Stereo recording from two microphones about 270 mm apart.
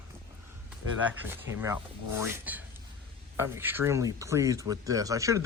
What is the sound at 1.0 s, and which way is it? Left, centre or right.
Speech, centre.